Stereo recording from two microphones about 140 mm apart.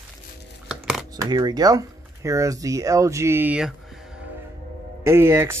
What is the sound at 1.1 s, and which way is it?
Speech, 30° right (ahead or behind).